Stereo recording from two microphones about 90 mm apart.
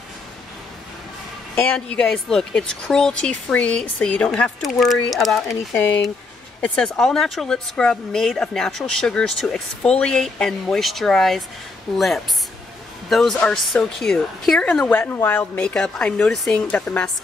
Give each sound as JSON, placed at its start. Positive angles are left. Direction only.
{"t": 1.5, "sound": "a woman's voice", "side_deg": 15}
{"t": 5.7, "sound": "speech", "side_deg": 20}
{"t": 6.6, "sound": "speech", "side_deg": 10}
{"t": 13.1, "sound": "a woman's voice", "side_deg": 5}
{"t": 15.0, "sound": "speech", "side_deg": 25}
{"t": 15.7, "sound": "a woman's voice", "side_deg": 10}